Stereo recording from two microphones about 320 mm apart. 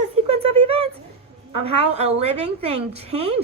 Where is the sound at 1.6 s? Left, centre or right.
Centre.